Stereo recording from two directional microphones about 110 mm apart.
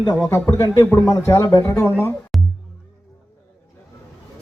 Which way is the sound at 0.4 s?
35° left (ahead or behind).